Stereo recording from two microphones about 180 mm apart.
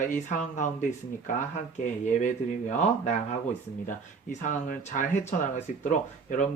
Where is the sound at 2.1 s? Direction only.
40° left (ahead or behind).